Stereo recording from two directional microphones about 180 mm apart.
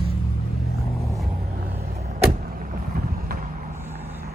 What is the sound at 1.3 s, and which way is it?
Vehicle, 50° right (ahead or behind).